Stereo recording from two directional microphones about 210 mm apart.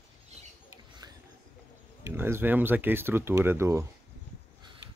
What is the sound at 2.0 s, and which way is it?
Speech, 10° right (ahead or behind).